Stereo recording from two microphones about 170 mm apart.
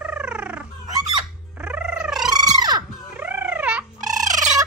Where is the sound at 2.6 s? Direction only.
25° right (ahead or behind).